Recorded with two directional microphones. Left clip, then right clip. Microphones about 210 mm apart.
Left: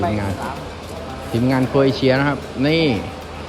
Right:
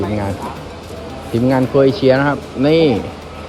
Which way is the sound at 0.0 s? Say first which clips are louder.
Right 1 dB; centre (ahead or behind).